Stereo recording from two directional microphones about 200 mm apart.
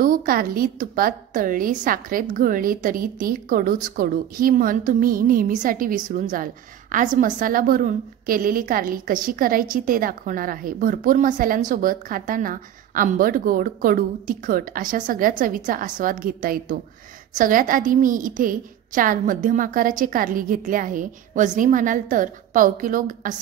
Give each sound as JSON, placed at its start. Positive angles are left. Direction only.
{"t": 0.0, "sound": "a woman's voice", "side_deg": -45}